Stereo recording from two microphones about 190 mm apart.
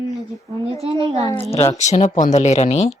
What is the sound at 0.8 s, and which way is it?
Speech, 30° right (ahead or behind).